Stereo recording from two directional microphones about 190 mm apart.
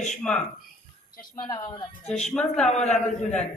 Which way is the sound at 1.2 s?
20° left (ahead or behind).